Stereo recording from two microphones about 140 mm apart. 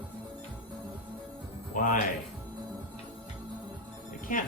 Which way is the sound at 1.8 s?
75° left (ahead or behind).